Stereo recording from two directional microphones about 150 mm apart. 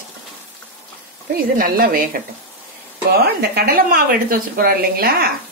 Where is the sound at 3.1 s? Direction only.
90° right.